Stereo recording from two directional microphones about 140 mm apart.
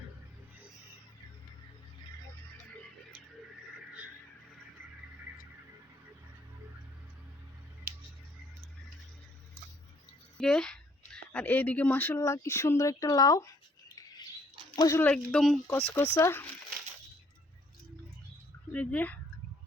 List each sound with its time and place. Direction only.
10.3 s speech: 5° left (ahead or behind); by 15.0 s 25° left (ahead or behind)
15.0 s speech: 10° left (ahead or behind)
15.6 s speech: 20° left (ahead or behind)
18.7 s speech: 10° left (ahead or behind)